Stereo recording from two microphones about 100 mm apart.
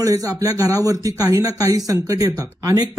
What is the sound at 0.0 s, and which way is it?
Speech, 35° right (ahead or behind).